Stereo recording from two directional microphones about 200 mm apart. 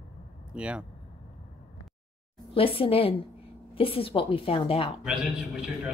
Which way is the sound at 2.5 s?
25° left (ahead or behind).